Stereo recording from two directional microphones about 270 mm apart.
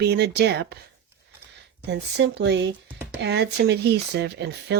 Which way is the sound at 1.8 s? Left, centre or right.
Right.